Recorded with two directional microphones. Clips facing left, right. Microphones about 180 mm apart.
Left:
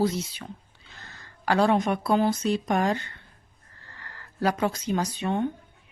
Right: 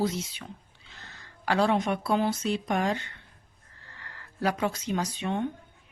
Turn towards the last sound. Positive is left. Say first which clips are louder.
# left 3 dB
turn(degrees=40)  # may be behind; listen again after turning